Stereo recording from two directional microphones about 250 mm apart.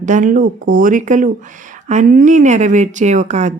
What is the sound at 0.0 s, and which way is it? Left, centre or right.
A woman's voice, right.